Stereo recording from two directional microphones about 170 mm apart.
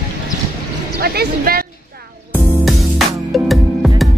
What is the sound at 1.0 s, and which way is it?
Speech, 60° right (ahead or behind).